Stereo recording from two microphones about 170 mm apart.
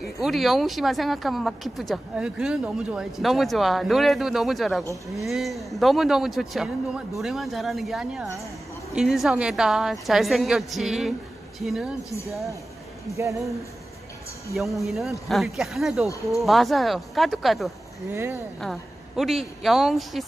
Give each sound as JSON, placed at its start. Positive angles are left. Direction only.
{"t": 0.2, "sound": "speech", "side_deg": 0}
{"t": 13.1, "sound": "speech", "side_deg": -20}
{"t": 14.5, "sound": "speech", "side_deg": 0}
{"t": 18.1, "sound": "speech", "side_deg": -15}
{"t": 18.6, "sound": "speech", "side_deg": 0}